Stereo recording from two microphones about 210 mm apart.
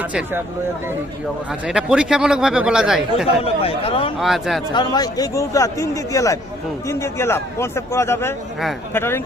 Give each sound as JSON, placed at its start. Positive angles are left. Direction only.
{"t": 0.0, "sound": "speech", "side_deg": -5}
{"t": 1.6, "sound": "speech", "side_deg": -5}
{"t": 3.4, "sound": "speech", "side_deg": 25}
{"t": 4.2, "sound": "speech", "side_deg": 0}
{"t": 4.7, "sound": "speech", "side_deg": 20}